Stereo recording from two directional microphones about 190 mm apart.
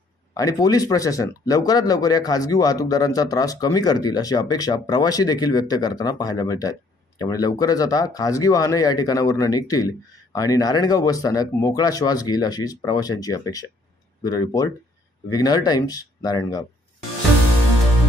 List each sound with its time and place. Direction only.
0.3 s speech: 20° left (ahead or behind)